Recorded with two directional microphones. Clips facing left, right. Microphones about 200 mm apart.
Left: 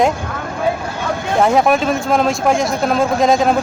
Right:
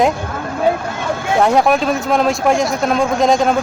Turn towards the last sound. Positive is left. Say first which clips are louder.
# even
turn(degrees=0)  # may be behind; listen again after turning